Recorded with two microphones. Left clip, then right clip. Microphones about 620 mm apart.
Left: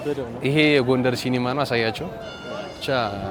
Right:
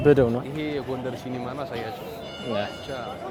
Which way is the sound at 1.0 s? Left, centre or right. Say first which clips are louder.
Left 9 dB; left.